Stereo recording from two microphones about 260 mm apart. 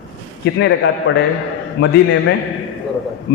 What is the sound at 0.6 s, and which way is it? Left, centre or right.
A man's voice, left.